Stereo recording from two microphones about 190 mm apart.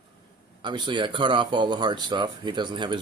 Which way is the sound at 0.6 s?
25° right (ahead or behind).